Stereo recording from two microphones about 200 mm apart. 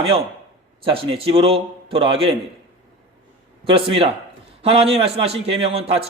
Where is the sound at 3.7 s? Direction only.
25° right (ahead or behind).